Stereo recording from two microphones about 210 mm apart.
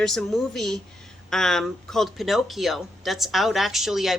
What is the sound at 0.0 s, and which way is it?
Speech, centre (ahead or behind).